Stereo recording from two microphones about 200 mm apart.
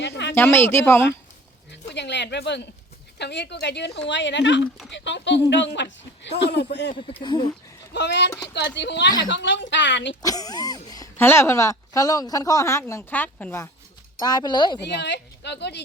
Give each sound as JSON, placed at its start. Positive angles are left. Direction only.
{"t": 0.0, "sound": "a sound", "side_deg": 60}
{"t": 0.3, "sound": "speech", "side_deg": 10}
{"t": 1.7, "sound": "speech", "side_deg": 60}
{"t": 7.2, "sound": "speech", "side_deg": 20}
{"t": 7.9, "sound": "speech", "side_deg": 60}
{"t": 10.2, "sound": "speech", "side_deg": 20}
{"t": 14.2, "sound": "speech", "side_deg": 20}
{"t": 15.0, "sound": "a woman's voice", "side_deg": 60}